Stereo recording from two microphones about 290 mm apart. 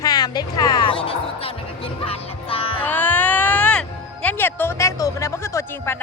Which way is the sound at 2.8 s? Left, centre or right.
Centre.